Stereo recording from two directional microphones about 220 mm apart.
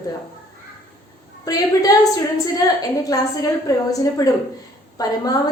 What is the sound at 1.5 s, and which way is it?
A woman's voice, 15° left (ahead or behind).